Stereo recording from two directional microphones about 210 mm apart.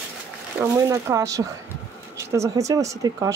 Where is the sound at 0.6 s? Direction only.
15° right (ahead or behind).